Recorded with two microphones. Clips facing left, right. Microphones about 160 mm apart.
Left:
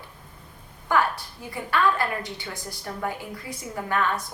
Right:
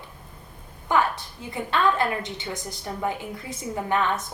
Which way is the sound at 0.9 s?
20° right (ahead or behind).